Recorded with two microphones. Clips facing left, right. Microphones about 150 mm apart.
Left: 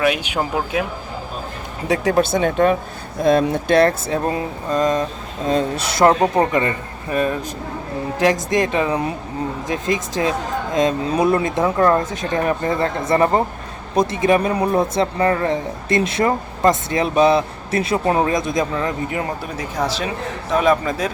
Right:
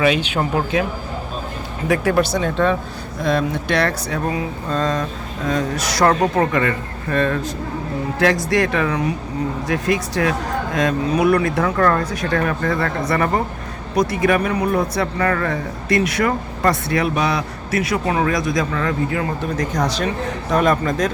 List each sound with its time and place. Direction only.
0.0 s speech: 10° left (ahead or behind)
1.9 s speech: 25° left (ahead or behind)
19.5 s speech: 5° left (ahead or behind)